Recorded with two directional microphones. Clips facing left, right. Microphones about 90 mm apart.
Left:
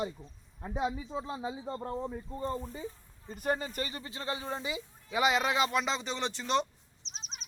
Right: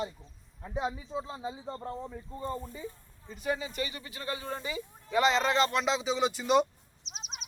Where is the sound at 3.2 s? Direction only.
45° left (ahead or behind).